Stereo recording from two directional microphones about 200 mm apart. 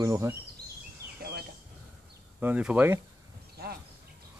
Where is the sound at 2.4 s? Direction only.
5° right (ahead or behind).